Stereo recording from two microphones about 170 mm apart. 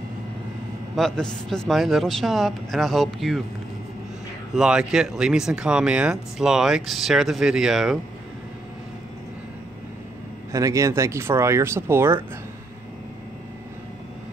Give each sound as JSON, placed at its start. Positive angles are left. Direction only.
{"t": 0.9, "sound": "speech", "side_deg": 5}
{"t": 4.6, "sound": "speech", "side_deg": -5}
{"t": 10.5, "sound": "speech", "side_deg": -20}